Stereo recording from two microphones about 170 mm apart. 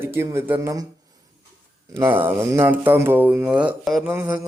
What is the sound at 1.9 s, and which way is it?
A man's voice, 15° right (ahead or behind).